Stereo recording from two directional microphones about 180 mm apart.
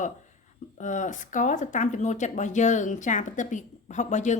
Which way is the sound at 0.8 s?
45° left (ahead or behind).